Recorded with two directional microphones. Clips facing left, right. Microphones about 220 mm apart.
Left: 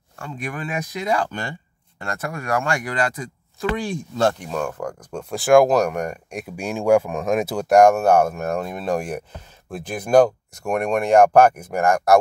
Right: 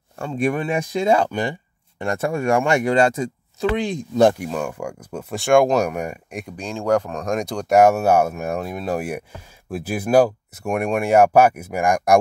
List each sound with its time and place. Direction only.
0.2 s speech: 30° right (ahead or behind); by 5.2 s 10° right (ahead or behind)
5.3 s speech: centre (ahead or behind)
6.4 s speech: 10° left (ahead or behind); by 12.2 s 15° right (ahead or behind)